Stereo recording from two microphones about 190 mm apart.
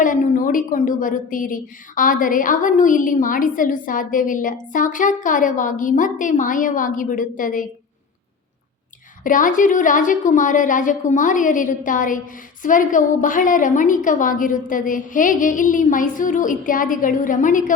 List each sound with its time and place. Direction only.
0.0 s a woman's voice: 45° left (ahead or behind)
9.2 s a woman's voice: 45° left (ahead or behind)